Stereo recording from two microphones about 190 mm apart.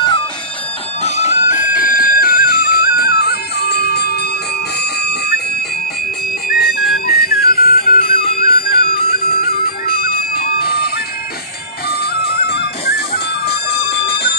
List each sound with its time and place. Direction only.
1.0 s music: 35° left (ahead or behind); by 4.3 s 55° left (ahead or behind)
6.5 s music: 55° left (ahead or behind)
11.9 s music: 55° left (ahead or behind)
13.8 s bell: 60° left (ahead or behind)